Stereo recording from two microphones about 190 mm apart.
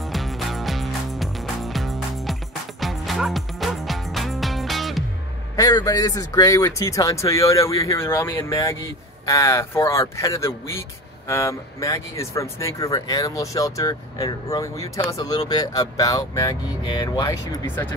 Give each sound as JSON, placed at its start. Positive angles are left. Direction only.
{"t": 0.0, "sound": "music", "side_deg": 0}
{"t": 5.6, "sound": "speech", "side_deg": 20}